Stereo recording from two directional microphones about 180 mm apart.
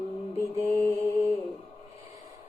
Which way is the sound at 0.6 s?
15° right (ahead or behind).